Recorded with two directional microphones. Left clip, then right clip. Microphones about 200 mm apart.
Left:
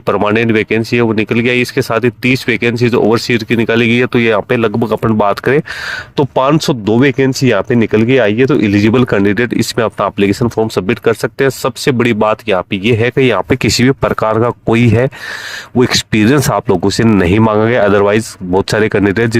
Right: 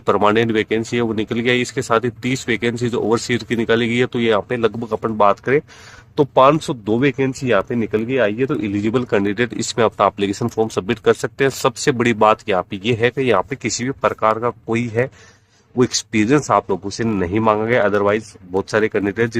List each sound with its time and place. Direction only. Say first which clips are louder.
0.0 s speech: left 3 dB; 25° left (ahead or behind)